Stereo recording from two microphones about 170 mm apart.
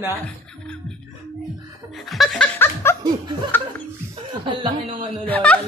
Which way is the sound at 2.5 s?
15° left (ahead or behind).